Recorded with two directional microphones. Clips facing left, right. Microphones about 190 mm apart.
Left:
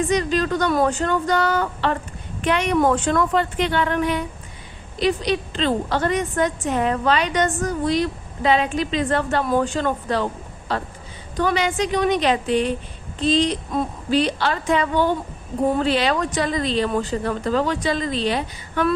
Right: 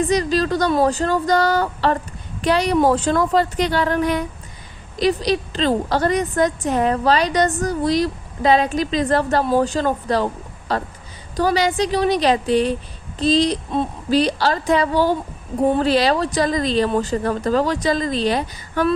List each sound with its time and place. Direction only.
0.1 s a woman's voice: 35° right (ahead or behind)